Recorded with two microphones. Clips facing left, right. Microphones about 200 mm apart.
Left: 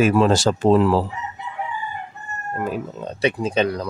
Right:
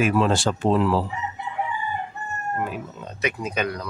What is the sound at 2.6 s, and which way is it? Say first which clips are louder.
Speech: left 5 dB; 35° left (ahead or behind).